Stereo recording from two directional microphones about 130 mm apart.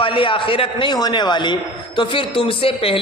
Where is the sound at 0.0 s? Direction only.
40° left (ahead or behind).